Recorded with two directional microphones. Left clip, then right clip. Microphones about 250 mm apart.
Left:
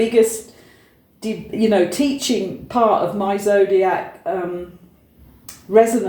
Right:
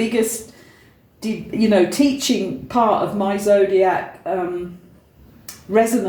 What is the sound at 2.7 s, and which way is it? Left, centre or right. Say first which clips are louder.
A woman's voice: left 1 dB; right.